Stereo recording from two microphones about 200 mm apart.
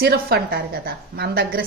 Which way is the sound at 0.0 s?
50° right (ahead or behind).